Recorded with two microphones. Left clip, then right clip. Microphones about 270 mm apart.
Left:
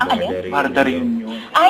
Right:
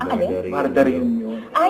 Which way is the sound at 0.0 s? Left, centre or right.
Centre.